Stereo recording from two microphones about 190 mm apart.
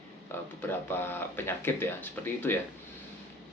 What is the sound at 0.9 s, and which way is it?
Speech, 10° left (ahead or behind).